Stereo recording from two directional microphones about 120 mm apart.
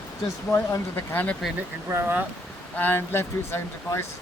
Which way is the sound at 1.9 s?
20° right (ahead or behind).